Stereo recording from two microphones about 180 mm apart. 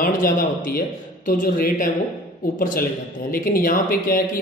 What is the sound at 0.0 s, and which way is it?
Speech, 55° left (ahead or behind).